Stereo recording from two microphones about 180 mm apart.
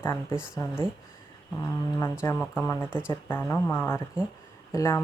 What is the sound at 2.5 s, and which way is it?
Speech, 10° left (ahead or behind).